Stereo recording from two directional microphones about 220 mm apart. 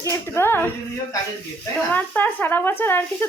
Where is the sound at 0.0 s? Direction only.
10° left (ahead or behind).